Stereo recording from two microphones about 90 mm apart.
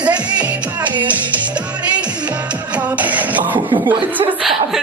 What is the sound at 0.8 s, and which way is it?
Music, 60° right (ahead or behind).